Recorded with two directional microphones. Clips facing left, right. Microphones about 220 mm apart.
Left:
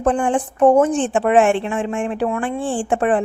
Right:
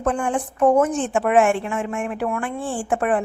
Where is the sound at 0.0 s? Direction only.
30° left (ahead or behind).